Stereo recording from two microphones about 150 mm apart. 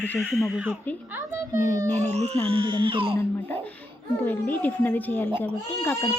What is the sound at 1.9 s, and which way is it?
Speech, 50° right (ahead or behind).